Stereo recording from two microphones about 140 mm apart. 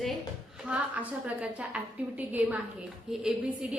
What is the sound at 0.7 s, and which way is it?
A woman's voice, 10° right (ahead or behind).